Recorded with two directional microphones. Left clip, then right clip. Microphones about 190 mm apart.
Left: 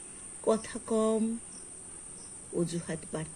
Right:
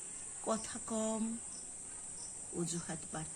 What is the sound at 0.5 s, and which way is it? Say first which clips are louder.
Speech: left 8 dB; 35° right (ahead or behind).